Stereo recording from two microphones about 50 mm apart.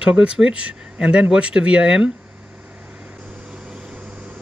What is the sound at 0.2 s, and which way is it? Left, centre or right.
Speech, centre.